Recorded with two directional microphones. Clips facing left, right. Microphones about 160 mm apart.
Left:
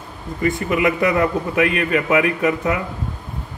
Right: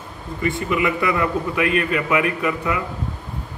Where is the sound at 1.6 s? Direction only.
40° left (ahead or behind).